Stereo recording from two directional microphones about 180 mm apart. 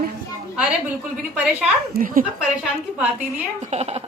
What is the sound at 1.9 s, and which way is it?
Speech, 50° right (ahead or behind).